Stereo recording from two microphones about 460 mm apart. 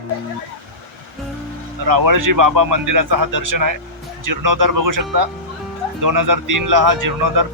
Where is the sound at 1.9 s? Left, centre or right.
Right.